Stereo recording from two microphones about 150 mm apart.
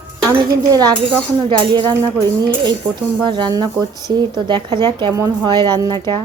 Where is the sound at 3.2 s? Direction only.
30° right (ahead or behind).